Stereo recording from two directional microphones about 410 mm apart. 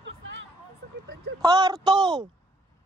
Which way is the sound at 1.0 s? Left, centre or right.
Right.